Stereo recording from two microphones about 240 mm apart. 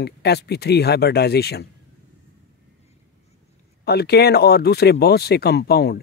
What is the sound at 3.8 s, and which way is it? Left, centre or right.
Speech, left.